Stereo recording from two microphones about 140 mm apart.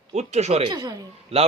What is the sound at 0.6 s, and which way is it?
Speech, 30° right (ahead or behind).